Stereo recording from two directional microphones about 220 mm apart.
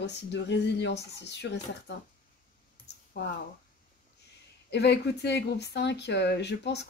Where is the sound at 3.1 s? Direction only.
40° left (ahead or behind).